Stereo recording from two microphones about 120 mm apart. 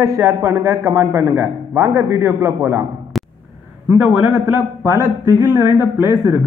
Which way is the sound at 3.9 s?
10° right (ahead or behind).